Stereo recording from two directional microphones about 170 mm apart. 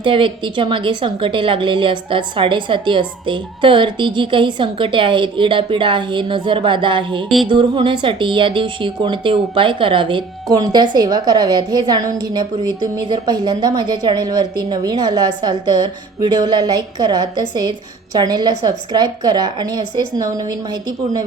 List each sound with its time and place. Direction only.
0.0 s a woman's voice: 30° right (ahead or behind)